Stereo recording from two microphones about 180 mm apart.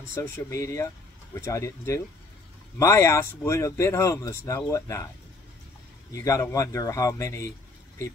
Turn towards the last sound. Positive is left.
turn(degrees=15)  # may be behind; listen again after turning